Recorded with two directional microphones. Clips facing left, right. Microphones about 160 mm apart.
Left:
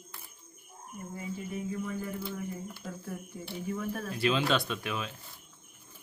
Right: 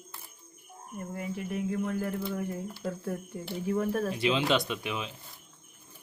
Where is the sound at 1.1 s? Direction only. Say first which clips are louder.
Right 3 dB; 70° right (ahead or behind).